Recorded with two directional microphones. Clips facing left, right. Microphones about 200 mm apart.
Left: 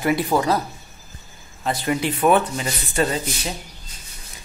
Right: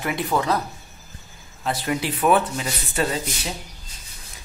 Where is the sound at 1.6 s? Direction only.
Centre (ahead or behind).